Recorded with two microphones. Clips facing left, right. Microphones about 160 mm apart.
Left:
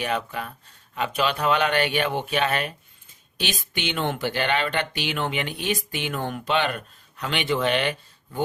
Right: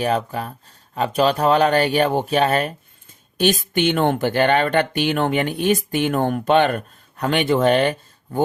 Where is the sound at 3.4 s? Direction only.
50° right (ahead or behind).